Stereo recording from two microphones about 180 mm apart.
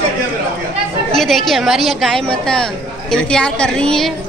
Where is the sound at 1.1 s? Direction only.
Centre (ahead or behind).